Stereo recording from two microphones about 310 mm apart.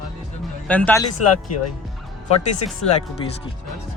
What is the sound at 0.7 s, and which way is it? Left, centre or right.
Speech, centre.